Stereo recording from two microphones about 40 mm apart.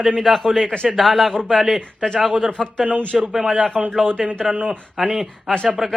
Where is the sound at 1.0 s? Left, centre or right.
Centre.